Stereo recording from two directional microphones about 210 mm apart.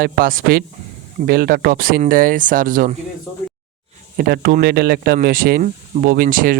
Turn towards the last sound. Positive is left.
turn(degrees=-40)  # may be behind; listen again after turning